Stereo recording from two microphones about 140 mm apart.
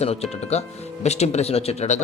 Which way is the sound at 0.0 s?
50° left (ahead or behind).